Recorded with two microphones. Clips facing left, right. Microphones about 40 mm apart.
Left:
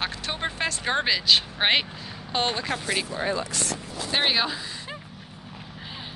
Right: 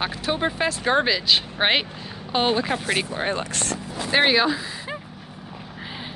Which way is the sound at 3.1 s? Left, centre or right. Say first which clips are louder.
Right 2 dB; right.